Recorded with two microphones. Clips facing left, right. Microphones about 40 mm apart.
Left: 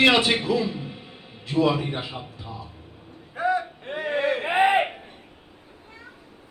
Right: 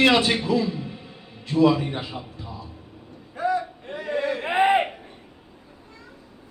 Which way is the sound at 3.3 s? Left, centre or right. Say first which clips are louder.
Even; left.